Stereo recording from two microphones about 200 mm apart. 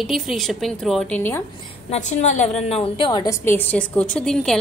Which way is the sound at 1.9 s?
35° left (ahead or behind).